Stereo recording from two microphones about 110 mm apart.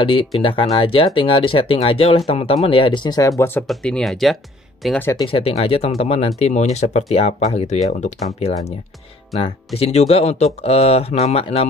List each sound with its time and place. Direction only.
0.0 s speech: 55° left (ahead or behind); by 3.4 s 30° left (ahead or behind)
3.6 s speech: 5° left (ahead or behind)
5.2 s speech: 60° left (ahead or behind)
9.8 s speech: 70° left (ahead or behind)